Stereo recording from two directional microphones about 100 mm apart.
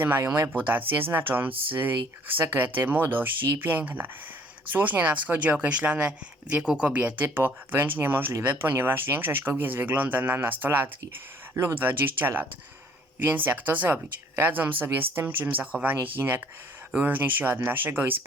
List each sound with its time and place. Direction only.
0.0 s a woman's voice: 20° right (ahead or behind)